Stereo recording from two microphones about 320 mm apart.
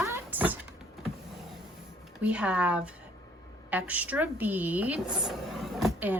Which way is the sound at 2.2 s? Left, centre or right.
Centre.